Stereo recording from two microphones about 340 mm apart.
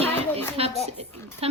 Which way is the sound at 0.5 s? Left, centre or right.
Centre.